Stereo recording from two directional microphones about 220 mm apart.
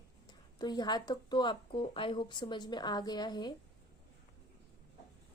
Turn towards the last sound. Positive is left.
turn(degrees=20)  # may be behind; listen again after turning